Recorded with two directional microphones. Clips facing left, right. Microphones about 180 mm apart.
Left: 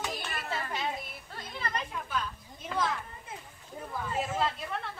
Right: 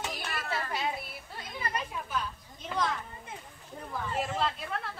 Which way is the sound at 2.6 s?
5° left (ahead or behind).